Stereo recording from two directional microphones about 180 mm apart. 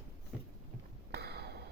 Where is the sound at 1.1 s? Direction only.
60° right (ahead or behind).